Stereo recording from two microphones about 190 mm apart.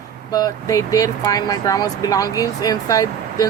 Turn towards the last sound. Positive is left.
turn(degrees=20)  # may be behind; listen again after turning